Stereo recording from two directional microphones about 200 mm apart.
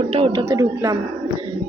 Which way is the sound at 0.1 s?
25° right (ahead or behind).